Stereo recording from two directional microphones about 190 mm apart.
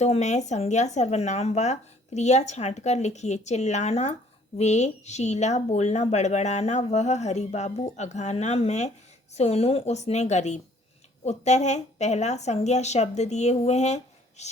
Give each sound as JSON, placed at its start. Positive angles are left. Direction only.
{"t": 0.0, "sound": "speech", "side_deg": 35}